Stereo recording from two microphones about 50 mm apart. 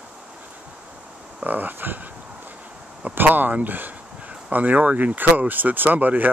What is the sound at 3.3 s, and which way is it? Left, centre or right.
Speech, right.